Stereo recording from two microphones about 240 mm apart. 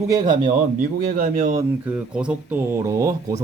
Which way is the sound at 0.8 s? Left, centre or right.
Right.